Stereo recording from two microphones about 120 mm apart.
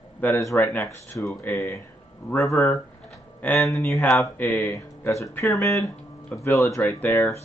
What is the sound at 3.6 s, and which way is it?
Speech, centre (ahead or behind).